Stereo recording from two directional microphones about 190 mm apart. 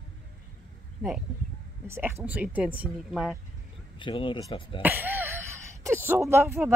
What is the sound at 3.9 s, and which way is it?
Speech, 25° left (ahead or behind).